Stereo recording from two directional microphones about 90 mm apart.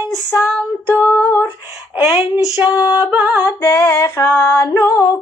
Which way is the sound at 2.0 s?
25° right (ahead or behind).